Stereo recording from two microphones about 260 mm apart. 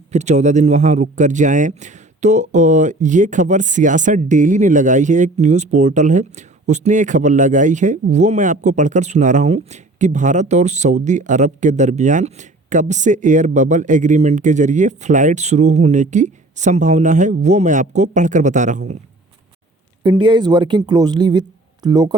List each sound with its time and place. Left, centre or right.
0.1 s speech: right
20.0 s speech: centre